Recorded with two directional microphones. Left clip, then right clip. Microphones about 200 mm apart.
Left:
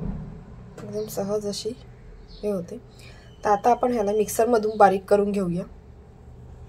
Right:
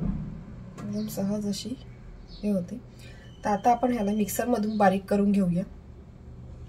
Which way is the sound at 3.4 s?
25° left (ahead or behind).